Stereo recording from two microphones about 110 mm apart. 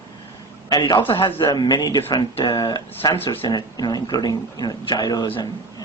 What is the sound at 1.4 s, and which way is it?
Speech, 40° left (ahead or behind).